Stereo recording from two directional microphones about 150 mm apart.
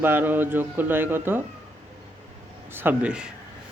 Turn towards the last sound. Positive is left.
turn(degrees=-5)  # may be behind; listen again after turning